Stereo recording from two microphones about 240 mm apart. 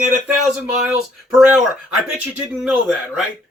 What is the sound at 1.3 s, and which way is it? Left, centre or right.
Speech, centre.